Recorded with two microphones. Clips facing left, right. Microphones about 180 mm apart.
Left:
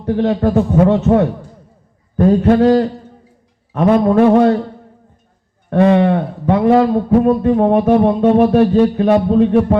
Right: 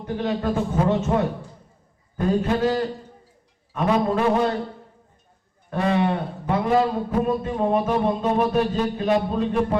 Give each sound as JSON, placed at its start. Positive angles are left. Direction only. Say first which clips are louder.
{"t": 0.0, "sound": "a man's voice", "louder": "left 10 dB", "side_deg": 60}
{"t": 5.7, "sound": "a man's voice", "louder": "left 10 dB", "side_deg": 65}